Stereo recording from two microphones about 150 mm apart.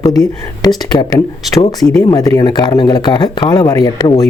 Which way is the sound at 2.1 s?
25° left (ahead or behind).